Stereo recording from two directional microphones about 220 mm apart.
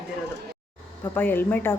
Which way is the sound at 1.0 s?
10° left (ahead or behind).